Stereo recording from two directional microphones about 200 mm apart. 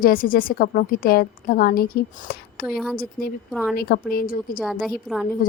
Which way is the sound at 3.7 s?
50° left (ahead or behind).